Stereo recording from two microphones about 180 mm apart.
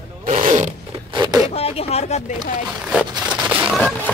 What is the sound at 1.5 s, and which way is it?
Speech, 35° left (ahead or behind).